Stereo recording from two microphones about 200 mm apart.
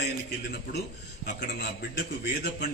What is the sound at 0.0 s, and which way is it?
A man's voice, 55° left (ahead or behind).